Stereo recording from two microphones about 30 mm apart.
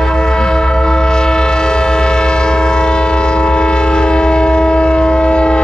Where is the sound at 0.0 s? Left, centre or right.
Left.